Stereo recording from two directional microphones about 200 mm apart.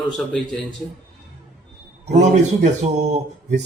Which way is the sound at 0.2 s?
5° left (ahead or behind).